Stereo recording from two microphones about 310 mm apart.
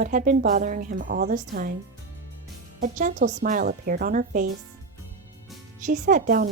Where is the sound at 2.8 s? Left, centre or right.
Right.